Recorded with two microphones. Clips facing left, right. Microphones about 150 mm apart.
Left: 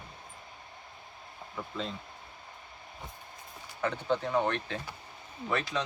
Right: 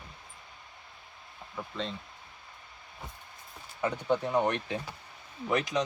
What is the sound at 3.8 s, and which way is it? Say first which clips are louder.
Speech: right 1 dB; 15° right (ahead or behind).